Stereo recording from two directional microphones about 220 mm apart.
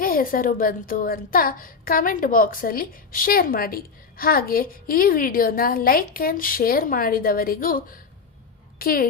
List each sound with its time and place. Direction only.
0.0 s a child's voice: 40° left (ahead or behind)